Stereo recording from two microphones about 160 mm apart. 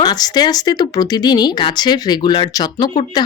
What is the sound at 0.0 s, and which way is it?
Speech, 25° left (ahead or behind).